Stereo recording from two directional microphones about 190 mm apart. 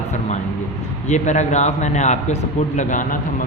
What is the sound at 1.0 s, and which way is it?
A man's voice, 40° left (ahead or behind).